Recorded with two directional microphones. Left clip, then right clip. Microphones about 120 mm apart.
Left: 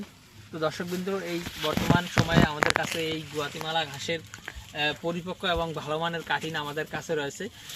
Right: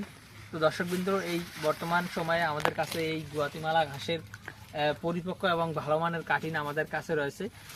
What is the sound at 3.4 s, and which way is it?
Speech, 20° right (ahead or behind).